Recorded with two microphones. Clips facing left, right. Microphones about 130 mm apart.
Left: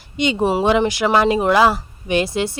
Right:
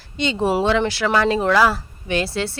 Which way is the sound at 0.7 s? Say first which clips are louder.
Left 3 dB; 15° left (ahead or behind).